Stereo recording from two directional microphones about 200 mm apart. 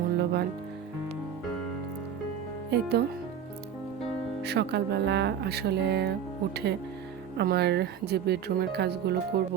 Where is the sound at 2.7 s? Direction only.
55° right (ahead or behind).